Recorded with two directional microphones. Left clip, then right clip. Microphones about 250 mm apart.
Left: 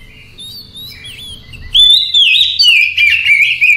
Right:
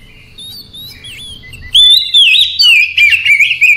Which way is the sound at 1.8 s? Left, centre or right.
Right.